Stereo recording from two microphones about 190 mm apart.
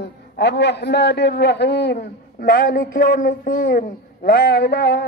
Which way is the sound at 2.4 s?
50° left (ahead or behind).